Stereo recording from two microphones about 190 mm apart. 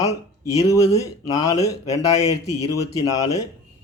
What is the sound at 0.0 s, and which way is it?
Speech, 15° left (ahead or behind).